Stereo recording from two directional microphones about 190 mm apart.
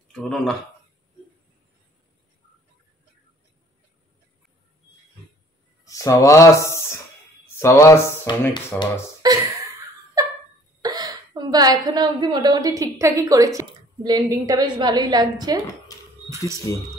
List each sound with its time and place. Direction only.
0.1 s speech: 5° left (ahead or behind)
5.9 s speech: 15° left (ahead or behind)
9.2 s speech: 20° right (ahead or behind)
10.8 s a woman's voice: 20° right (ahead or behind)
16.7 s speech: 15° left (ahead or behind)